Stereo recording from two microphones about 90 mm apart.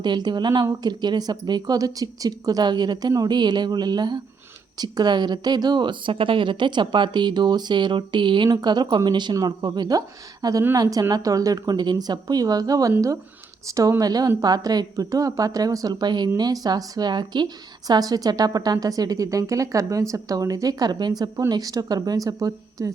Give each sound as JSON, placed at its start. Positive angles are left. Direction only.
{"t": 0.0, "sound": "a woman's voice", "side_deg": -55}